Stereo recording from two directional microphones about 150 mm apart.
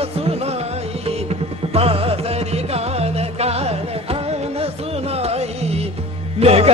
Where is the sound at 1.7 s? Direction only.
40° right (ahead or behind).